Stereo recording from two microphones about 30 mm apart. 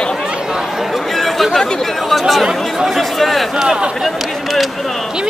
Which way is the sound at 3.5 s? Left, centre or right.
Centre.